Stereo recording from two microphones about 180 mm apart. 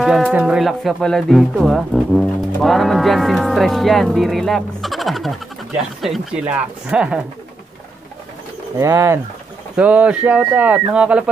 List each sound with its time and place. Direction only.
0.0 s speech: centre (ahead or behind)
8.7 s speech: 15° right (ahead or behind)